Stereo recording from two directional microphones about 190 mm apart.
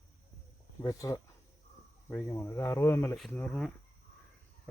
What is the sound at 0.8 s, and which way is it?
Speech, 15° left (ahead or behind).